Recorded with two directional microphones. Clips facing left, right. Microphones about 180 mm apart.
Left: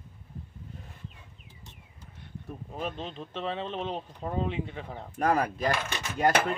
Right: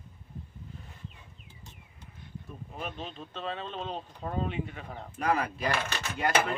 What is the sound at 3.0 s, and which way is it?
Speech, 25° left (ahead or behind).